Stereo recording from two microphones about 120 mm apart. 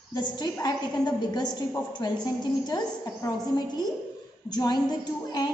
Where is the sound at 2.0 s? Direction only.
35° left (ahead or behind).